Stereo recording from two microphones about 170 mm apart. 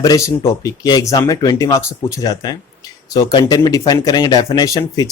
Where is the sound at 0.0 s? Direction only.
20° left (ahead or behind).